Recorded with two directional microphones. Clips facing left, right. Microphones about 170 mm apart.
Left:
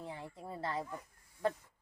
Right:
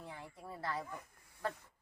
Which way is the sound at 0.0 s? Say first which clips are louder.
Left 4 dB; 25° left (ahead or behind).